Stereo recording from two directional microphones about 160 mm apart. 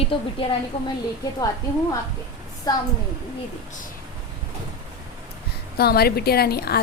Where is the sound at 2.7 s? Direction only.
25° left (ahead or behind).